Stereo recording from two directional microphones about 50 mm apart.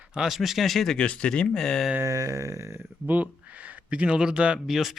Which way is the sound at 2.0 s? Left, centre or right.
Right.